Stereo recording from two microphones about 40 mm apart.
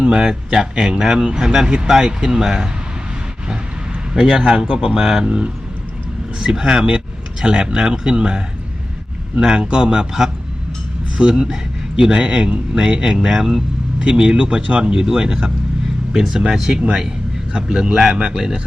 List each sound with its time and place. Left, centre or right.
0.0 s speech: right
4.1 s speech: centre
6.4 s speech: centre
10.1 s speech: centre
11.2 s speech: right
13.1 s speech: centre
14.0 s speech: right